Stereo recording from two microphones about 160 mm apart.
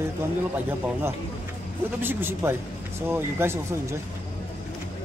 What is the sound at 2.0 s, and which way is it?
A man's voice, 15° right (ahead or behind).